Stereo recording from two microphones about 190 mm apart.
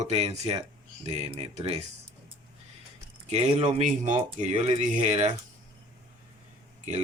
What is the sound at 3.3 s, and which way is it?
Speech, 35° right (ahead or behind).